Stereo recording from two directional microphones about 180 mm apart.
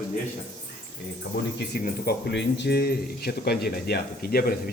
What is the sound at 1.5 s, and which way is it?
Speech, 65° left (ahead or behind).